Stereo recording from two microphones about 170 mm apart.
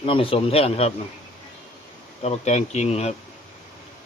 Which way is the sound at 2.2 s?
40° left (ahead or behind).